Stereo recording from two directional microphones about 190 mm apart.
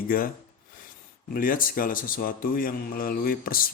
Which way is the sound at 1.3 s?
45° left (ahead or behind).